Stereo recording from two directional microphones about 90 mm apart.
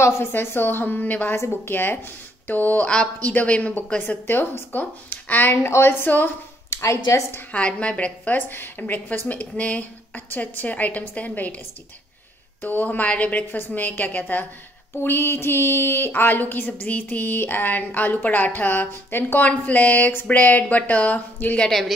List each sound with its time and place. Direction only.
0.0 s speech: 25° left (ahead or behind)
2.4 s a sound: 20° left (ahead or behind)
2.9 s speech: 10° left (ahead or behind); by 7.2 s 35° left (ahead or behind)
7.5 s a woman's voice: 15° left (ahead or behind)
12.6 s speech: 20° left (ahead or behind)
21.6 s a woman's voice: 5° left (ahead or behind)